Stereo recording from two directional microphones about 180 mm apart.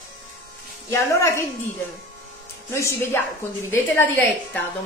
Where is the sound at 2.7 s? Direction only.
15° left (ahead or behind).